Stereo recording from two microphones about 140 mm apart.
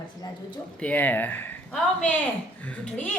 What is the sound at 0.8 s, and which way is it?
Speech, 10° left (ahead or behind).